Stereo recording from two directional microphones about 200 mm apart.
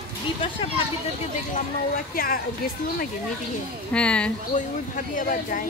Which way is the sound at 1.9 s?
45° left (ahead or behind).